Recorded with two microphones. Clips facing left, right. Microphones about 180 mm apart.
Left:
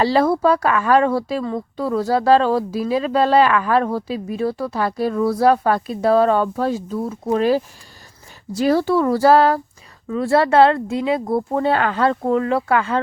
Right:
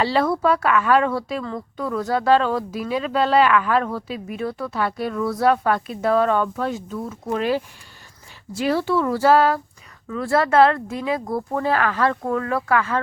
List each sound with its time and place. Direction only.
0.0 s speech: 35° left (ahead or behind)
10.1 s speech: 25° left (ahead or behind)